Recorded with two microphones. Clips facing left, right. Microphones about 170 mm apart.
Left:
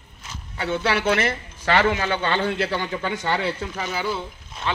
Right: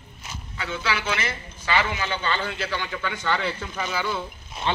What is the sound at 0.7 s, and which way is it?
Speech, 60° left (ahead or behind).